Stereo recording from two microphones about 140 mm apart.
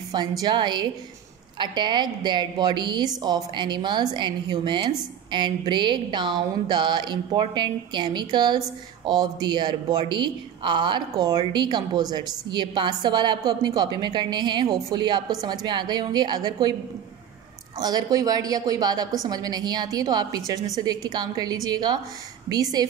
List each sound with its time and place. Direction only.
0.4 s a woman's voice: 30° right (ahead or behind)
17.7 s a woman's voice: 25° right (ahead or behind)